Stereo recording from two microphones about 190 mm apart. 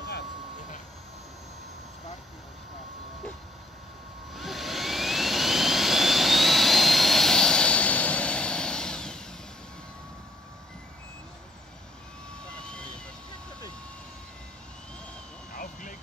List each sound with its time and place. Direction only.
4.3 s jet engine: centre (ahead or behind)
12.4 s vehicle: 5° left (ahead or behind)
15.5 s vehicle: 45° left (ahead or behind)